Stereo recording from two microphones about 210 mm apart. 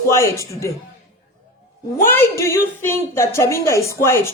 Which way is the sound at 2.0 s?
10° left (ahead or behind).